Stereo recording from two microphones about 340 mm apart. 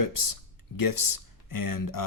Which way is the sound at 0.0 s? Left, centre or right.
Left.